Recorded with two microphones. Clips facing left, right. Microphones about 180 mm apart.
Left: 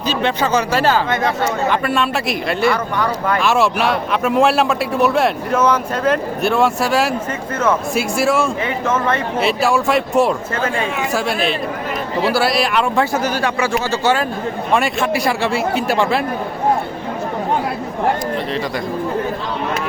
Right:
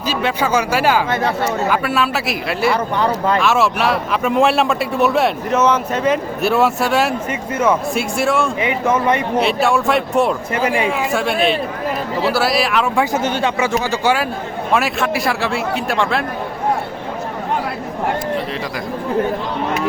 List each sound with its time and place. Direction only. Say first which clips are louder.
0.1 s a man's voice: even; 5° right (ahead or behind)
2.7 s speech: right 2 dB; 30° right (ahead or behind)
3.4 s a man's voice: left 3 dB; centre (ahead or behind)
8.6 s speech: right 2 dB; 15° right (ahead or behind)
9.4 s a man's voice: even; centre (ahead or behind)
10.5 s speech: right 3 dB; 15° right (ahead or behind)
11.1 s a man's voice: right 1 dB; centre (ahead or behind)
13.1 s speech: right 1 dB; 25° right (ahead or behind)
13.9 s a man's voice: even; 10° right (ahead or behind)